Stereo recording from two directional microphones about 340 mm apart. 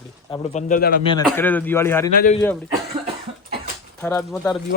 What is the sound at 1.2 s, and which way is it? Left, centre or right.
Speech, centre.